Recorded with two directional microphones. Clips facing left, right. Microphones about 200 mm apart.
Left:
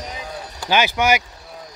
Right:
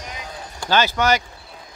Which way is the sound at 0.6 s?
15° left (ahead or behind).